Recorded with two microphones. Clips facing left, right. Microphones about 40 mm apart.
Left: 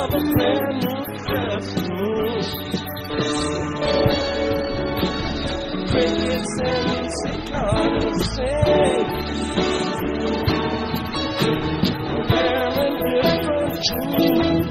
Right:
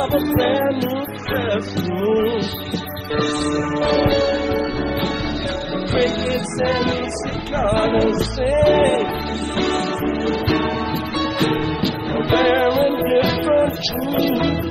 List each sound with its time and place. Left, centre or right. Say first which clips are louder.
0.0 s music: right 2 dB; right
5.9 s music: even; right
12.3 s music: right 5 dB; right